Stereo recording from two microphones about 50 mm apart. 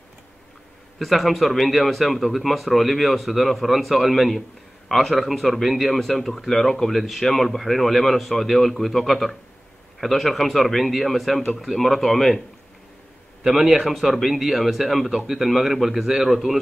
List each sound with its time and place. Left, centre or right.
0.9 s a man's voice: centre
13.4 s a man's voice: centre